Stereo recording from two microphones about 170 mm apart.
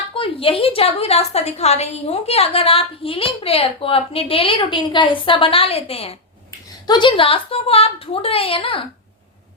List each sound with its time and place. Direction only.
0.1 s a woman's voice: 30° left (ahead or behind)